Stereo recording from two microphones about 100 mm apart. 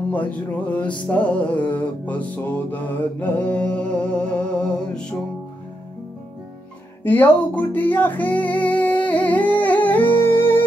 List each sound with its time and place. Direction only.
0.6 s music: 15° left (ahead or behind)
7.0 s music: 20° left (ahead or behind)